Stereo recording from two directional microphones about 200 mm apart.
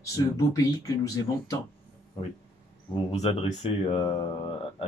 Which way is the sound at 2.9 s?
30° left (ahead or behind).